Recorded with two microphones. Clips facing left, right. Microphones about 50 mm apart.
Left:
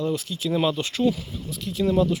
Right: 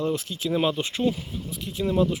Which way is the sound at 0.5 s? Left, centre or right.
Centre.